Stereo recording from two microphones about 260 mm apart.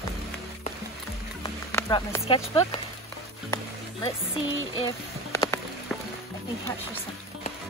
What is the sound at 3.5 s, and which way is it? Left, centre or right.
Music, centre.